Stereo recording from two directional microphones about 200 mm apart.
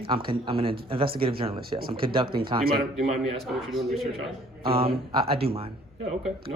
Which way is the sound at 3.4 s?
Centre (ahead or behind).